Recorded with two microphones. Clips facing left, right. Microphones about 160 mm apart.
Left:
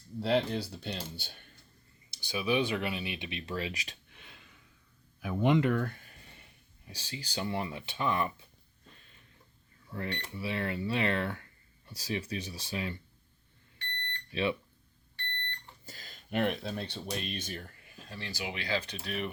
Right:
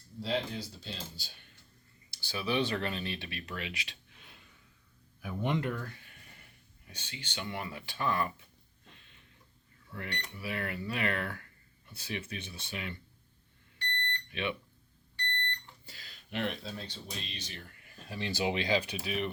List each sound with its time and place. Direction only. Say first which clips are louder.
0.2 s speech: left 5 dB; 65° left (ahead or behind)
2.0 s speech: left 3 dB; 15° left (ahead or behind); by 3.9 s 40° left (ahead or behind)
5.2 s speech: left 6 dB; 90° left; by 6.1 s 55° left (ahead or behind)
6.1 s a sound: left 2 dB; 25° left (ahead or behind)
6.8 s speech: left 4 dB; 35° left (ahead or behind)
9.9 s speech: left 4 dB; 30° left (ahead or behind)
14.3 s speech: left 5 dB; 30° left (ahead or behind)
15.9 s speech: left 5 dB; 45° left (ahead or behind)
18.1 s speech: right 7 dB; 20° right (ahead or behind)
18.8 s speech: right 2 dB; 10° right (ahead or behind)